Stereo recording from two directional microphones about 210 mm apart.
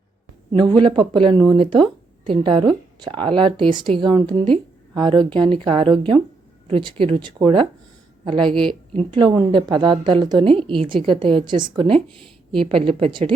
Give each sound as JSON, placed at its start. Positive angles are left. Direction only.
{"t": 0.5, "sound": "speech", "side_deg": -20}
{"t": 8.4, "sound": "a woman's voice", "side_deg": 5}
{"t": 9.1, "sound": "speech", "side_deg": -20}